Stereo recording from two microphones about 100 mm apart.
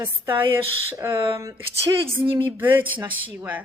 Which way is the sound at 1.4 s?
30° right (ahead or behind).